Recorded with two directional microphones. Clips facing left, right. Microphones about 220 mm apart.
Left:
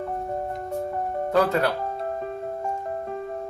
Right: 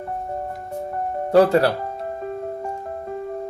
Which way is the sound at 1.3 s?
30° right (ahead or behind).